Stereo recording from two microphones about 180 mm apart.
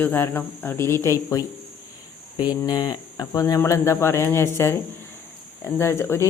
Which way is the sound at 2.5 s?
20° left (ahead or behind).